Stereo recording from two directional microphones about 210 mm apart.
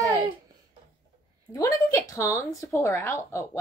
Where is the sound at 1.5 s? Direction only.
15° left (ahead or behind).